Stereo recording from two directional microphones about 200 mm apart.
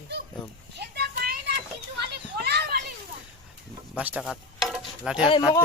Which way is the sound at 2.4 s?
55° right (ahead or behind).